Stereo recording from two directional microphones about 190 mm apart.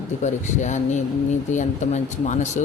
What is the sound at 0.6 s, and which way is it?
A man's voice, 40° left (ahead or behind).